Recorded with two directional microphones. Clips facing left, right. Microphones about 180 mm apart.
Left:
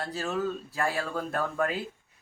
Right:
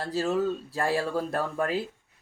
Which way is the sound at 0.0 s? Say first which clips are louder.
Right 4 dB; 30° right (ahead or behind).